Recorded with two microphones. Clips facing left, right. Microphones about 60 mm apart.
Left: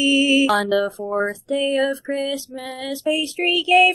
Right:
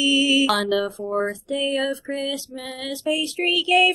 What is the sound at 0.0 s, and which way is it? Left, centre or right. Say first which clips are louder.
Mantra: left 3 dB; left.